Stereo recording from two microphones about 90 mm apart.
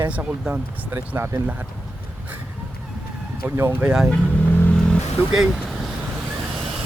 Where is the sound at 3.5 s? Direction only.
25° right (ahead or behind).